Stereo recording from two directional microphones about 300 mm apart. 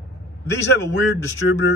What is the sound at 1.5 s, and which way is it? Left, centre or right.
Speech, left.